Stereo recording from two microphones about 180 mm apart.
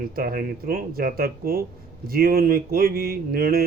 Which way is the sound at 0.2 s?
55° right (ahead or behind).